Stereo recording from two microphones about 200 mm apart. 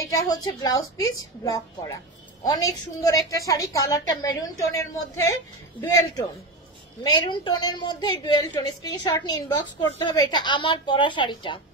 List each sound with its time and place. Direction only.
0.3 s a woman's voice: 20° left (ahead or behind)
7.0 s a woman's voice: 20° left (ahead or behind)